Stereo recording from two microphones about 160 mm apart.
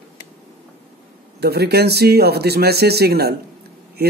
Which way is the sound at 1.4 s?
90° right.